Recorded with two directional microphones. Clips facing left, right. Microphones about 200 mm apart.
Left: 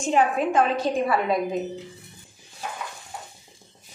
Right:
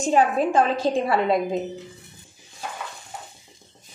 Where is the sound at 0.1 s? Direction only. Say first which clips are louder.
Right 1 dB; 30° right (ahead or behind).